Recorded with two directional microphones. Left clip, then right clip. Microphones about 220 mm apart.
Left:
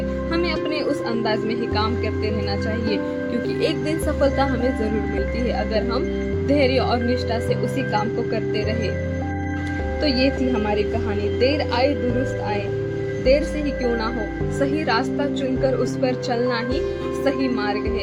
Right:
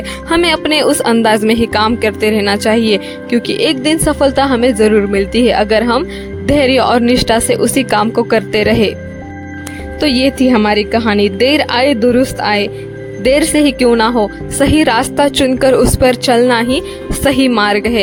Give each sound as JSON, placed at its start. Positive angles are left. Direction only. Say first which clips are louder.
{"t": 0.3, "sound": "speech", "louder": "right 13 dB", "side_deg": -45}
{"t": 10.0, "sound": "speech", "louder": "right 9 dB", "side_deg": -45}
{"t": 13.2, "sound": "speech", "louder": "right 10 dB", "side_deg": -50}